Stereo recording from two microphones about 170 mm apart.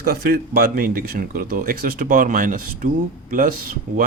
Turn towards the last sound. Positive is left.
turn(degrees=-55)  # may be behind; listen again after turning